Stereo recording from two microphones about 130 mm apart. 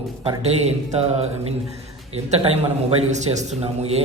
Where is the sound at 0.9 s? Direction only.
50° right (ahead or behind).